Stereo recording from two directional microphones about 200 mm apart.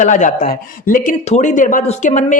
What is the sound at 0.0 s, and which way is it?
Speech, 40° left (ahead or behind).